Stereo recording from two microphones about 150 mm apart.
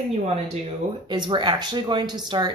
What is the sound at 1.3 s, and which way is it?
Speech, 30° right (ahead or behind).